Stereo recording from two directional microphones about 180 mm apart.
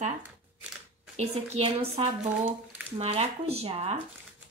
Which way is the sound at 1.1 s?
35° right (ahead or behind).